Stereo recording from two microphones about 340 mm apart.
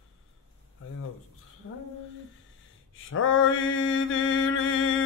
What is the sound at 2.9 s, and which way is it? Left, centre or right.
Mantra, left.